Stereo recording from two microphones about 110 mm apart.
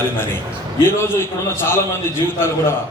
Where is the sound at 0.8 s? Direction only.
20° left (ahead or behind).